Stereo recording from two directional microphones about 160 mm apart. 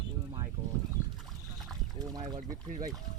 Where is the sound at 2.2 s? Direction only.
50° right (ahead or behind).